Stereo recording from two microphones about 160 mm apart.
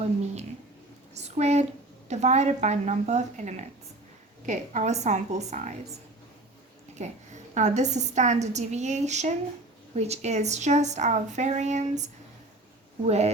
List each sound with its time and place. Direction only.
1.1 s a sound: 45° right (ahead or behind)
2.0 s a woman's voice: 45° right (ahead or behind)
7.0 s a woman's voice: 50° right (ahead or behind)